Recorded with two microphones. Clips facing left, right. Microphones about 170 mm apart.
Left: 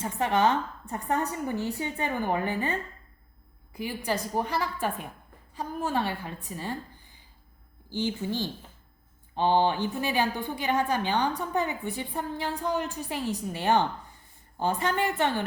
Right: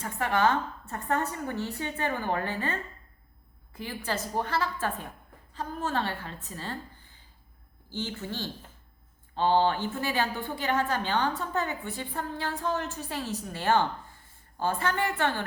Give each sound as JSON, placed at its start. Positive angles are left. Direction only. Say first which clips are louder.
{"t": 0.0, "sound": "a woman's voice", "louder": "left 2 dB", "side_deg": 20}